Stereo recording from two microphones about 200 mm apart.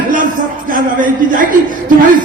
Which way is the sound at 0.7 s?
40° right (ahead or behind).